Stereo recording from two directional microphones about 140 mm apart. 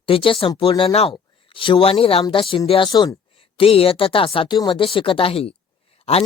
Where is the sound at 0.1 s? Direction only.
40° left (ahead or behind).